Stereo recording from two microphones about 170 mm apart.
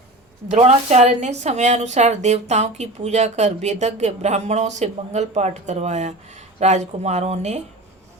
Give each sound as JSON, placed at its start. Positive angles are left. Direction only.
{"t": 0.5, "sound": "a woman's voice", "side_deg": -40}